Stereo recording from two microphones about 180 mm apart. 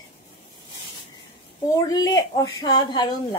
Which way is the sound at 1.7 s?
20° left (ahead or behind).